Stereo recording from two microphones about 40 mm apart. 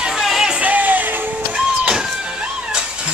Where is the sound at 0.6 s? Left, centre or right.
Right.